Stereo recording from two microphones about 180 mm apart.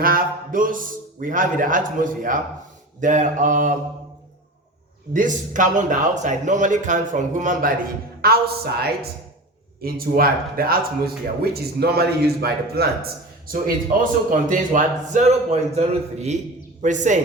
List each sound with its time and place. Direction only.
0.0 s speech: 55° right (ahead or behind)
5.1 s speech: 45° right (ahead or behind)
8.2 s a man's voice: 60° right (ahead or behind); by 17.2 s 45° right (ahead or behind)